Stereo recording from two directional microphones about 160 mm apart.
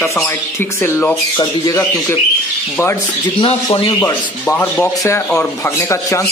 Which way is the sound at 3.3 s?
35° left (ahead or behind).